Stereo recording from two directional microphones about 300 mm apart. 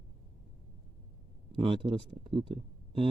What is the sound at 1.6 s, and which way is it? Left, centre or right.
Speech, centre.